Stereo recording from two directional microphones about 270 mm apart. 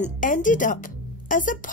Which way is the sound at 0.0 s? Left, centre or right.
Left.